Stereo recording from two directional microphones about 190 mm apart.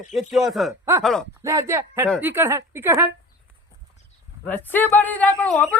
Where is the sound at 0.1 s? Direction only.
Centre (ahead or behind).